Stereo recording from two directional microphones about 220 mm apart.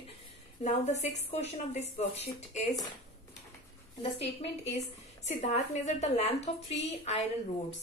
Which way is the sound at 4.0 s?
25° left (ahead or behind).